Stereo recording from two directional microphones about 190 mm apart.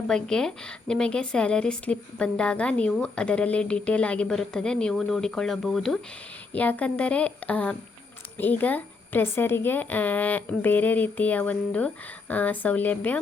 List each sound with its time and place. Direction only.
0.1 s a woman's voice: 5° left (ahead or behind)